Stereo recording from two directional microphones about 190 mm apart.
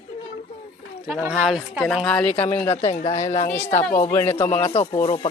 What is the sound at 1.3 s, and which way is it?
A woman's voice, centre (ahead or behind).